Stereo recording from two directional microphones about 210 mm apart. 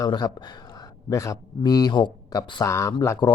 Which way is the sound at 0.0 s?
20° left (ahead or behind).